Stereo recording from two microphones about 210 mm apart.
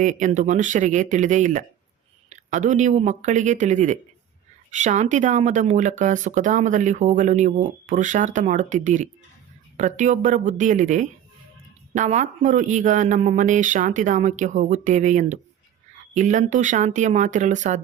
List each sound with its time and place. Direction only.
0.0 s speech: 35° right (ahead or behind)